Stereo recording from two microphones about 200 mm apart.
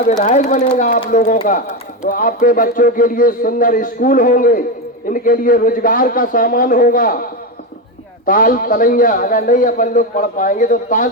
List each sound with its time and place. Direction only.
0.2 s a man's voice: 35° left (ahead or behind)